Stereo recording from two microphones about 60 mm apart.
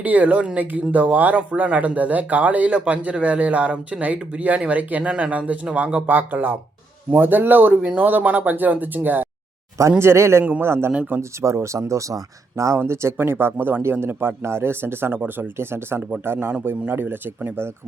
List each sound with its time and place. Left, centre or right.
0.0 s speech: right
10.0 s a man's voice: right
12.8 s speech: right
16.0 s speech: right
16.2 s speech: right